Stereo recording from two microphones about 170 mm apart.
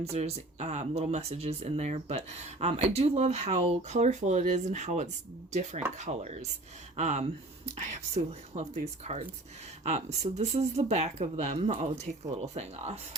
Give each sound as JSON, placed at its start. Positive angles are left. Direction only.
{"t": 0.0, "sound": "speech", "side_deg": -40}